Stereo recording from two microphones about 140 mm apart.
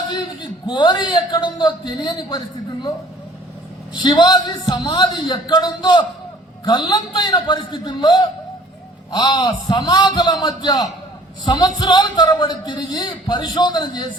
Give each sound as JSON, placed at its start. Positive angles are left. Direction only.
{"t": 0.7, "sound": "speech", "side_deg": 35}
{"t": 3.9, "sound": "speech", "side_deg": 30}